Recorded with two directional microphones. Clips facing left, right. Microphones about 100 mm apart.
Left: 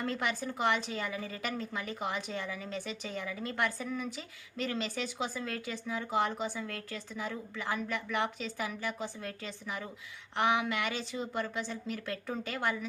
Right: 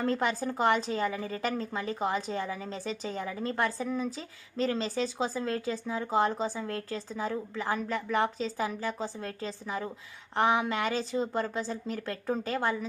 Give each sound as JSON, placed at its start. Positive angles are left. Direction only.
{"t": 0.0, "sound": "speech", "side_deg": -35}